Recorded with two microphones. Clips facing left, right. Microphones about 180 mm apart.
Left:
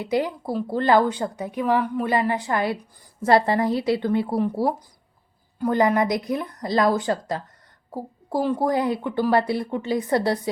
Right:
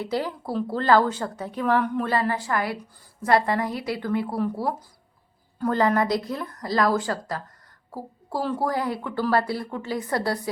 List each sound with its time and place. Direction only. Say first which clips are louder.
0.0 s a woman's voice: left 4 dB; 15° left (ahead or behind)